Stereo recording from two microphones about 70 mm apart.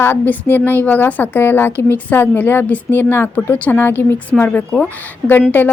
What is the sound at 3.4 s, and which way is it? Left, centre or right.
A woman's voice, left.